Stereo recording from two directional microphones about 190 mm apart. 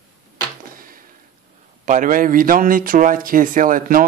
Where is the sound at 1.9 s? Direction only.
45° right (ahead or behind).